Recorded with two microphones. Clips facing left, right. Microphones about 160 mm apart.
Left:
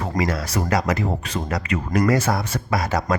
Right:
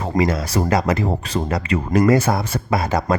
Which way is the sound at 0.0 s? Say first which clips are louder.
Right 4 dB; 25° right (ahead or behind).